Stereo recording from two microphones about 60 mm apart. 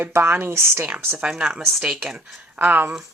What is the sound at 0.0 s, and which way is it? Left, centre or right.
Speech, right.